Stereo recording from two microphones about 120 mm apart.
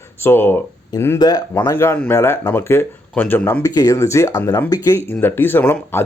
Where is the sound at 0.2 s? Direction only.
20° left (ahead or behind).